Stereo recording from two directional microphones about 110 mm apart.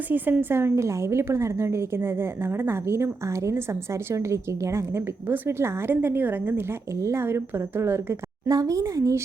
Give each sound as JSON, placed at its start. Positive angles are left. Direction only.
{"t": 0.1, "sound": "a woman's voice", "side_deg": -15}
{"t": 8.4, "sound": "a woman's voice", "side_deg": -30}